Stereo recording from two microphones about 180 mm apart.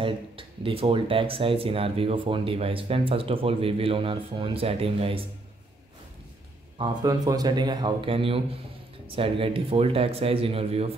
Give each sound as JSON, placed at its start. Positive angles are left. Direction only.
{"t": 0.0, "sound": "speech", "side_deg": -30}
{"t": 6.8, "sound": "a man's voice", "side_deg": -20}